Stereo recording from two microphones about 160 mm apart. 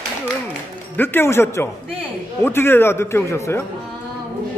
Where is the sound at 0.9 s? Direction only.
15° left (ahead or behind).